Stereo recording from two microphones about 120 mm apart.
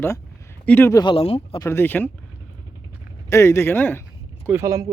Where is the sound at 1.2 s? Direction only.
55° left (ahead or behind).